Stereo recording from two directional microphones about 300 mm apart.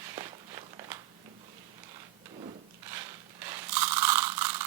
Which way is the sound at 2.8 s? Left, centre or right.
Centre.